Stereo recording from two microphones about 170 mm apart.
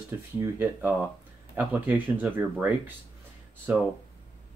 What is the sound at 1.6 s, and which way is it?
Speech, 10° right (ahead or behind).